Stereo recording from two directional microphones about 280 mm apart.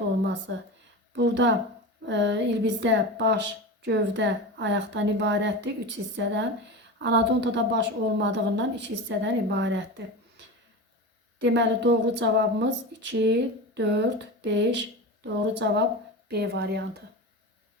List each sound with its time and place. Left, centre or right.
1.1 s a woman's voice: right
11.3 s a woman's voice: right